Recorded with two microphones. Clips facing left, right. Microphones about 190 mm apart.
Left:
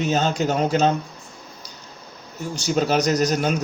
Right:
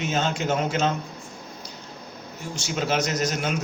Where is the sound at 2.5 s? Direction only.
40° left (ahead or behind).